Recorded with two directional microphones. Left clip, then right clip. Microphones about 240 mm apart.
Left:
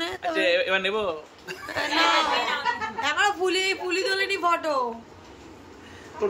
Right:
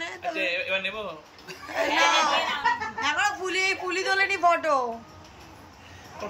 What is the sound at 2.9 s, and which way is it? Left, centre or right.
A man's voice, centre.